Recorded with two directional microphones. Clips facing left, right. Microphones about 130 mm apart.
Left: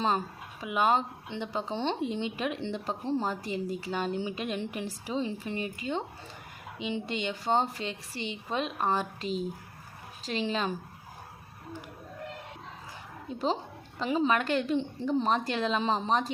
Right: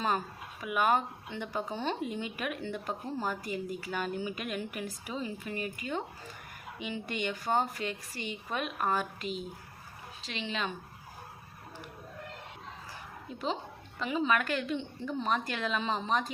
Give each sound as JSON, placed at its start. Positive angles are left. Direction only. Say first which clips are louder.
{"t": 0.6, "sound": "a woman's voice", "louder": "left 2 dB", "side_deg": 25}
{"t": 14.0, "sound": "a woman's voice", "louder": "left 3 dB", "side_deg": 35}